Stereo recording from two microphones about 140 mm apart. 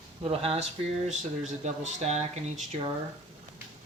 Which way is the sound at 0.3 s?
45° right (ahead or behind).